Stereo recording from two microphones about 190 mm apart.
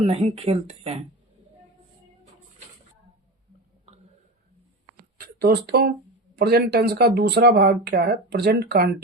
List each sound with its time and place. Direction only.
0.0 s speech: 30° right (ahead or behind)
5.1 s speech: 55° right (ahead or behind)